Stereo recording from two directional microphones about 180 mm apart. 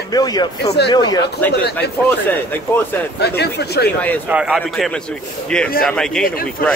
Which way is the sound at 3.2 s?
65° left (ahead or behind).